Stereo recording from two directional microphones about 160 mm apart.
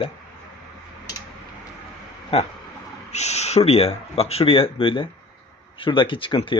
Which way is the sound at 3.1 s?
45° left (ahead or behind).